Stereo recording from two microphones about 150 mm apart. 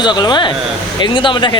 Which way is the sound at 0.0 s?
30° left (ahead or behind).